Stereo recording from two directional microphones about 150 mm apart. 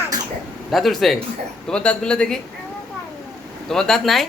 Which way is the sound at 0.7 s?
Centre (ahead or behind).